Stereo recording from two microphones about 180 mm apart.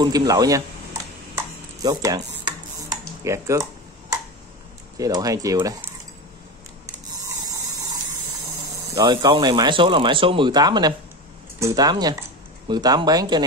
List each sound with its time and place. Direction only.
0.0 s speech: 20° right (ahead or behind)
1.3 s ping: 20° right (ahead or behind)
3.3 s speech: 15° right (ahead or behind)
4.9 s speech: 20° right (ahead or behind)
7.1 s printer: 20° right (ahead or behind)
8.9 s speech: 20° right (ahead or behind)